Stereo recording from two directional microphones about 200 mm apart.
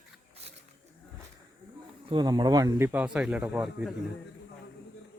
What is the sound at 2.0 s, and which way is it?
Speech, 20° right (ahead or behind).